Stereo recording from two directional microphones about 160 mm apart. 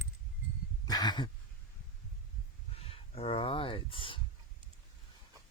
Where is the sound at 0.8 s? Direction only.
25° left (ahead or behind).